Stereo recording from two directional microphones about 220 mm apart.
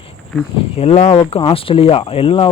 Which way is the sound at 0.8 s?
30° left (ahead or behind).